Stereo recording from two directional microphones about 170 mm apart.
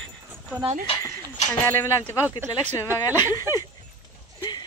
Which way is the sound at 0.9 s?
15° left (ahead or behind).